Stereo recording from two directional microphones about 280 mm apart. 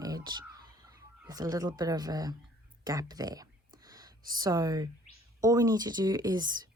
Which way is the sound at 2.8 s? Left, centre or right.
Centre.